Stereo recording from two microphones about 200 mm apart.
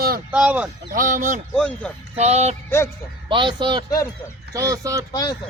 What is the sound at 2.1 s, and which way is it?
Music, 35° right (ahead or behind).